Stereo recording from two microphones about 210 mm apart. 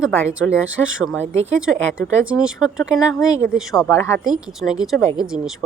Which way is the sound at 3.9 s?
15° left (ahead or behind).